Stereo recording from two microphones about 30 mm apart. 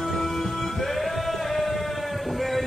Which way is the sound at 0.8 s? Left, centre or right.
Centre.